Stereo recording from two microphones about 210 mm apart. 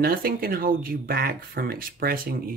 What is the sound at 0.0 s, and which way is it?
Speech, 45° right (ahead or behind).